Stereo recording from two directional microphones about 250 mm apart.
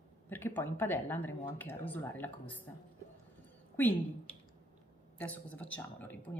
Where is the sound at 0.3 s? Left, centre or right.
Centre.